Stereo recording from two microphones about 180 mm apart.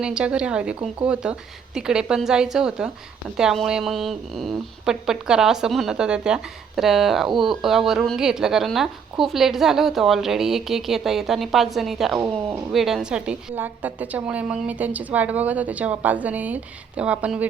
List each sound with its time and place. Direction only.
0.0 s speech: 5° right (ahead or behind)
12.1 s a woman's voice: 15° right (ahead or behind)
12.7 s a woman's voice: centre (ahead or behind)